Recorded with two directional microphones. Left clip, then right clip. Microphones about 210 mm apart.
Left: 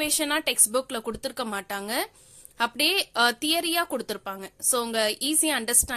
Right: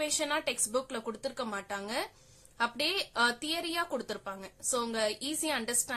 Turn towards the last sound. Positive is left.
turn(degrees=40)  # may be behind; listen again after turning